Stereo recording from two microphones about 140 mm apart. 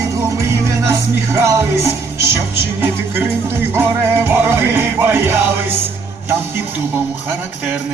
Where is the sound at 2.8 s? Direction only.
15° right (ahead or behind).